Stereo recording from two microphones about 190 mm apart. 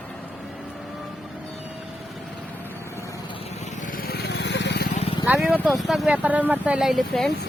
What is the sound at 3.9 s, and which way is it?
Vehicle, 50° left (ahead or behind).